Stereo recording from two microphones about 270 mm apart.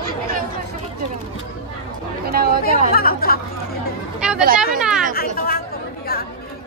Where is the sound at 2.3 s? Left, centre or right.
Right.